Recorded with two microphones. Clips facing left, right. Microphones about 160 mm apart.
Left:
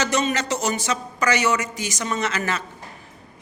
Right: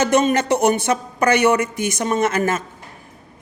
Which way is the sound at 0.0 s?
50° right (ahead or behind).